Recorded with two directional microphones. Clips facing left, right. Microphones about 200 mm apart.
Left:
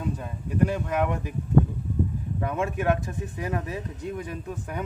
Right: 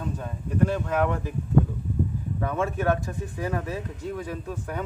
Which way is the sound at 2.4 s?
15° left (ahead or behind).